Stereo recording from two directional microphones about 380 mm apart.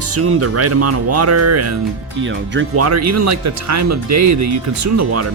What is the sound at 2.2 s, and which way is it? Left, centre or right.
Speech, right.